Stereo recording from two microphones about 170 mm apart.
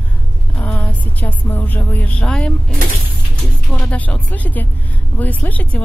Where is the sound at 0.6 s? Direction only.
10° left (ahead or behind).